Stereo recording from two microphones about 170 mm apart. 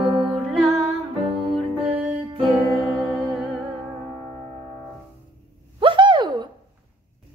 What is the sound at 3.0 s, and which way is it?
Humming, centre (ahead or behind).